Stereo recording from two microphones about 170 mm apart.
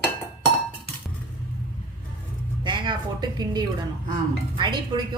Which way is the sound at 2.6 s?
25° right (ahead or behind).